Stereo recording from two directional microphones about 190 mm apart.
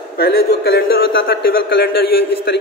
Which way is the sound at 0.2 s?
55° left (ahead or behind).